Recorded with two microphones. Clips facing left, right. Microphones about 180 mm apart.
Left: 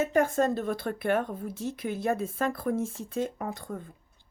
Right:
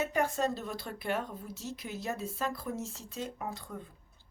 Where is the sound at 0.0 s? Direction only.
50° left (ahead or behind).